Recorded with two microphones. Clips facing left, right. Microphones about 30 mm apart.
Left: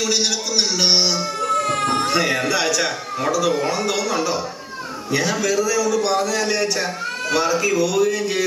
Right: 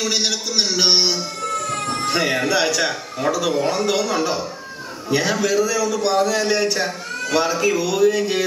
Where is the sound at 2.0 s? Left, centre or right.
Centre.